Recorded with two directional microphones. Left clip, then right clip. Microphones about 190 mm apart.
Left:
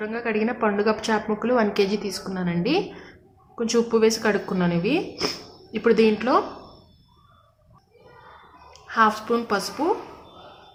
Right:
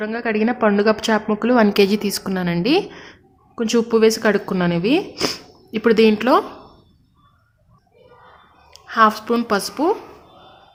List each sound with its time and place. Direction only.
0.0 s a woman's voice: 45° right (ahead or behind)
8.7 s a woman's voice: 45° right (ahead or behind)